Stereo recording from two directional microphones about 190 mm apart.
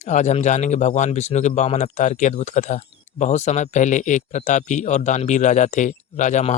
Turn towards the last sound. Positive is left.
turn(degrees=40)  # may be behind; listen again after turning